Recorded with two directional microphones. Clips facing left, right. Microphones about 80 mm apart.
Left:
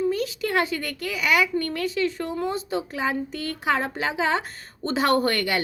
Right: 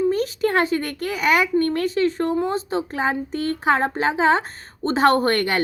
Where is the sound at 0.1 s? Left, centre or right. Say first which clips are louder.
Right 4 dB; right.